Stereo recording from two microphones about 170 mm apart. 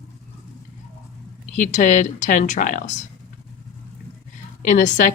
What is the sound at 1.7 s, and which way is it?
Speech, 50° left (ahead or behind).